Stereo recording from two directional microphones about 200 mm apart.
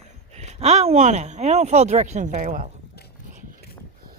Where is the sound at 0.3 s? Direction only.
35° right (ahead or behind).